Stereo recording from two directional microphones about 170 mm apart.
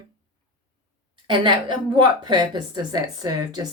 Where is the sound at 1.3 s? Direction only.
30° right (ahead or behind).